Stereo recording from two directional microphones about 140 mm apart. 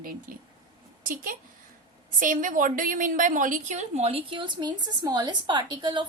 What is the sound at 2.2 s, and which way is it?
A woman's voice, 70° right (ahead or behind).